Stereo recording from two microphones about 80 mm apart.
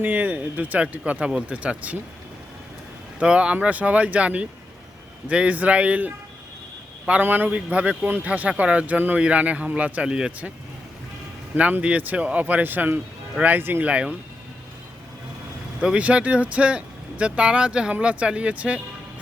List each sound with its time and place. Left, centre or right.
0.0 s speech: right
3.2 s speech: centre
7.2 s speech: right
11.5 s speech: centre
13.9 s speech: centre
15.8 s speech: centre